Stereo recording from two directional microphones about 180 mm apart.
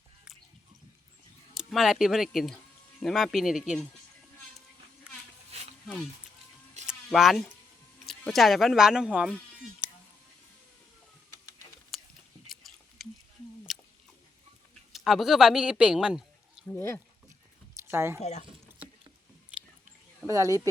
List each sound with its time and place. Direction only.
1.5 s speech: centre (ahead or behind)
6.8 s a sound: centre (ahead or behind)
8.0 s speech: centre (ahead or behind)
11.9 s a sound: centre (ahead or behind)
13.7 s rodents: centre (ahead or behind)
14.9 s speech: centre (ahead or behind)
16.6 s speech: 15° left (ahead or behind)
17.7 s a sound: 15° right (ahead or behind)
18.2 s speech: 40° left (ahead or behind)
19.5 s whispering: 5° right (ahead or behind)
20.2 s speech: 20° right (ahead or behind)